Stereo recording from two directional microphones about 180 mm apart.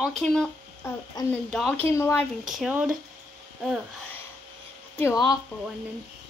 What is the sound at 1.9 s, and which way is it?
Speech, 15° left (ahead or behind).